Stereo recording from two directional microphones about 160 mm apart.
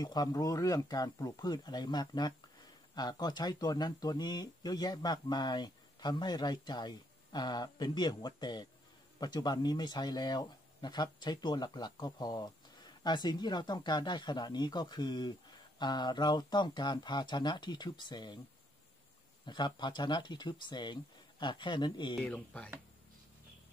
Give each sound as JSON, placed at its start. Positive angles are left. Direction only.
{"t": 0.0, "sound": "speech", "side_deg": 25}
{"t": 19.4, "sound": "speech", "side_deg": 30}
{"t": 22.2, "sound": "speech", "side_deg": 10}